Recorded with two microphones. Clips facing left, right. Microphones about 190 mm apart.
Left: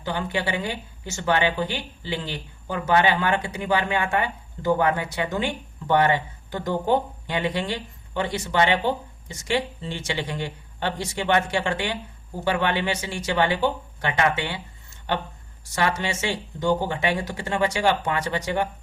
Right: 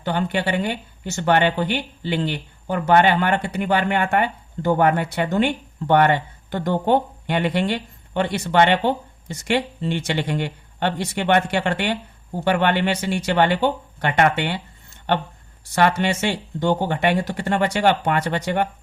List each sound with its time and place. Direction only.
0.0 s speech: 65° right (ahead or behind)
15.7 s speech: 60° right (ahead or behind)